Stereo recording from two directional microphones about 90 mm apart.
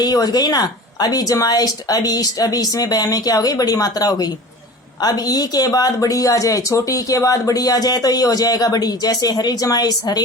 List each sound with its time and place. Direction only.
0.0 s speech: 45° left (ahead or behind)